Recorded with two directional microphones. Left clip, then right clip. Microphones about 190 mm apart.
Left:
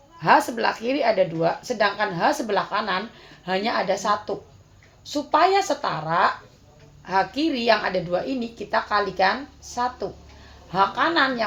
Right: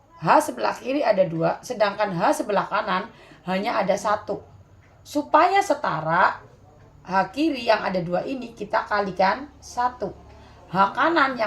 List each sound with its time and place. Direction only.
0.2 s a woman's voice: 35° left (ahead or behind)
10.7 s speech: 30° left (ahead or behind)